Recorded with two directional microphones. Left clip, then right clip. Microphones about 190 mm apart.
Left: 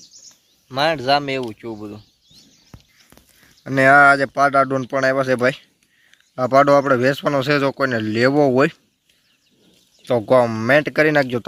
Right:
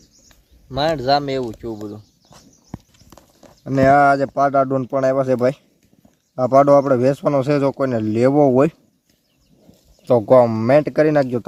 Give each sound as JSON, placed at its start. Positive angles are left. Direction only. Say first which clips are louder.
{"t": 0.1, "sound": "a sound", "louder": "left 10 dB", "side_deg": -45}
{"t": 0.7, "sound": "speech", "louder": "even", "side_deg": 15}
{"t": 1.7, "sound": "speech", "louder": "right 2 dB", "side_deg": 40}
{"t": 3.6, "sound": "speech", "louder": "left 2 dB", "side_deg": 0}
{"t": 4.5, "sound": "speech", "louder": "even", "side_deg": 20}
{"t": 4.8, "sound": "speech", "louder": "right 1 dB", "side_deg": 0}
{"t": 8.3, "sound": "speech", "louder": "right 2 dB", "side_deg": 15}
{"t": 8.5, "sound": "speech", "louder": "right 1 dB", "side_deg": 0}
{"t": 10.0, "sound": "speech", "louder": "right 3 dB", "side_deg": -10}